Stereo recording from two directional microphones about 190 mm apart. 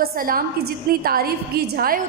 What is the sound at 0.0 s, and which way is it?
A woman's voice, 50° right (ahead or behind).